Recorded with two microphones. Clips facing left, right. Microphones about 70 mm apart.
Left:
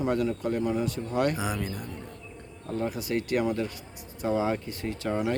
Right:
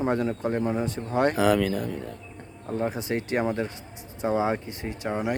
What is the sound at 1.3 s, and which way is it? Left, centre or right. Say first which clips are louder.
Speech: right 10 dB; right.